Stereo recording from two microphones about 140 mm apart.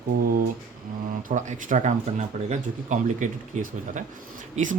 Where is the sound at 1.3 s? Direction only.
65° right (ahead or behind).